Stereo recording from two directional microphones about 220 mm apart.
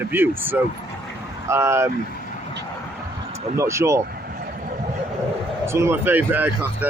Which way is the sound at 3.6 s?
15° right (ahead or behind).